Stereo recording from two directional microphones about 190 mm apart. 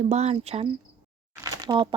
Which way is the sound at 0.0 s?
35° right (ahead or behind).